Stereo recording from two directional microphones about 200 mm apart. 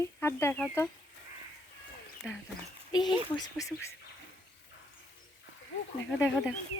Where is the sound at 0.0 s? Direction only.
15° left (ahead or behind).